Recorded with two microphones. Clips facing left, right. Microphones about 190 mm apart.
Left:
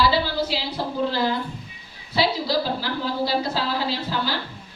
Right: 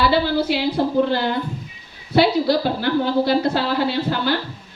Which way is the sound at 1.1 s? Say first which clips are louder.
Right 3 dB; 60° right (ahead or behind).